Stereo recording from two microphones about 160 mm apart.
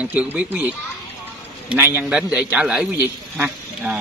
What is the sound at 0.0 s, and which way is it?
A man's voice, 10° right (ahead or behind).